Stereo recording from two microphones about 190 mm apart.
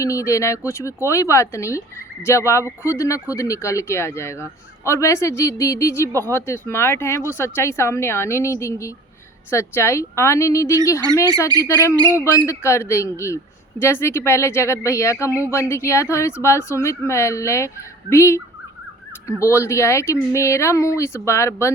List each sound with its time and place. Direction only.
0.0 s speech: 15° left (ahead or behind)